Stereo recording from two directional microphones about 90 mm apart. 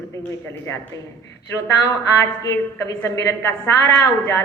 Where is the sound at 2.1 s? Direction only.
35° left (ahead or behind).